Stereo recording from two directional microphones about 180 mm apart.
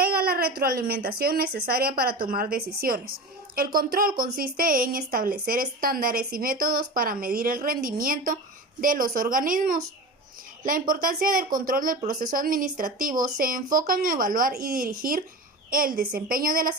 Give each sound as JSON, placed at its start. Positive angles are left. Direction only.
{"t": 0.0, "sound": "a woman's voice", "side_deg": -55}